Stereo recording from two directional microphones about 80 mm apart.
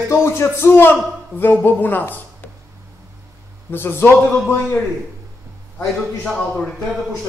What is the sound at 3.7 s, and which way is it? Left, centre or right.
A man's voice, left.